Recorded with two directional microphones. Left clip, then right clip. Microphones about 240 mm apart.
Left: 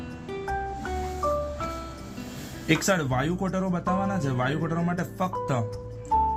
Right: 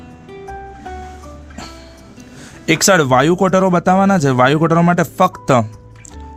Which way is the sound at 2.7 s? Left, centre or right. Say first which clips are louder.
Right 13 dB; right.